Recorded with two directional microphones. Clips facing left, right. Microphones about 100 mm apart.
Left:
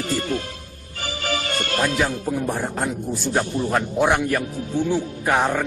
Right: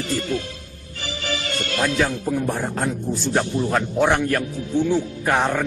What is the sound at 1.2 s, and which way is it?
Music, 50° left (ahead or behind).